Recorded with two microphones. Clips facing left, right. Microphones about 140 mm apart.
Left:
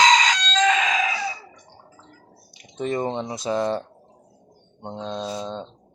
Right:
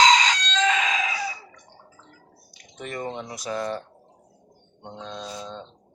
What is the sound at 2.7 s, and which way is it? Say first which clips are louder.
Speech: left 7 dB; 25° left (ahead or behind).